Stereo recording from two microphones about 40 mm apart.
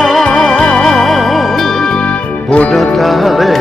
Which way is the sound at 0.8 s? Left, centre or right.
Centre.